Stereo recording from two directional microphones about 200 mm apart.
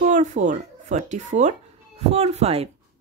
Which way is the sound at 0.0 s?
35° right (ahead or behind).